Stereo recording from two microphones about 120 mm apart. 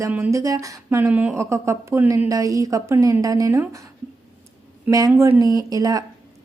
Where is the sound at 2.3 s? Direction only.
30° right (ahead or behind).